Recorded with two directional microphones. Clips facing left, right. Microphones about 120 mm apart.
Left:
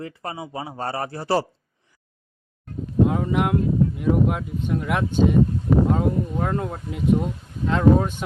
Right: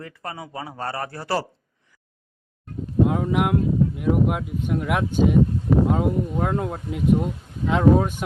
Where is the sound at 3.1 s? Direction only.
Centre (ahead or behind).